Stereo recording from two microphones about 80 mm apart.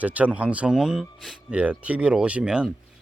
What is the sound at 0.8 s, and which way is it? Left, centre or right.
Speech, centre.